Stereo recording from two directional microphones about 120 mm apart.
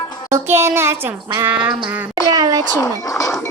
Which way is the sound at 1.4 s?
10° right (ahead or behind).